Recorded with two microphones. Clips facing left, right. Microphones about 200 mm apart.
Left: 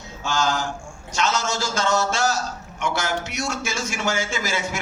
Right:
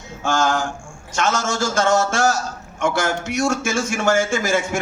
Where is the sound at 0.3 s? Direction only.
50° right (ahead or behind).